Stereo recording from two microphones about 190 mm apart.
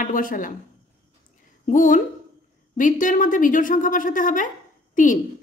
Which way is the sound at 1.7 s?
45° left (ahead or behind).